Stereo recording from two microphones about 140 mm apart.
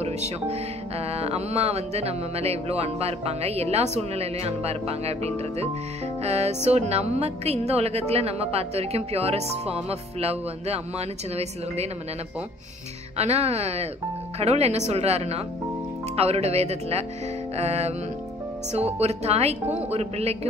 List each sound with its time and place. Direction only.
0.0 s music: 50° right (ahead or behind)
13.2 s music: 50° right (ahead or behind)